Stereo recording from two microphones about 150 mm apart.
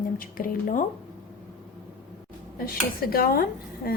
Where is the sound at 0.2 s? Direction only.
65° left (ahead or behind).